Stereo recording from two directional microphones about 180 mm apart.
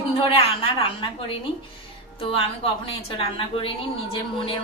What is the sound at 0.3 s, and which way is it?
Speech, 30° left (ahead or behind).